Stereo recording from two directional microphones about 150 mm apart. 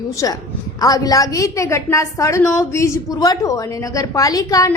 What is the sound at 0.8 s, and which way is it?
A woman's voice, 25° left (ahead or behind).